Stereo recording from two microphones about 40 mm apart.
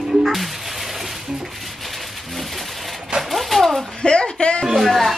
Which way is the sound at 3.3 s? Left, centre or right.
Centre.